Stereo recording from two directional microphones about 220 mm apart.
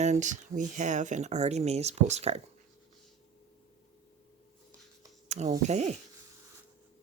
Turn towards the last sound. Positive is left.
turn(degrees=-30)  # may be behind; listen again after turning